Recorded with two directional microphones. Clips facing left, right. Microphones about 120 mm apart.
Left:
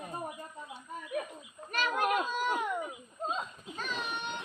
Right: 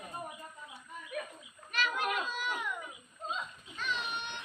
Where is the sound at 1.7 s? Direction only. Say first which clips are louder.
Left 4 dB; 45° left (ahead or behind).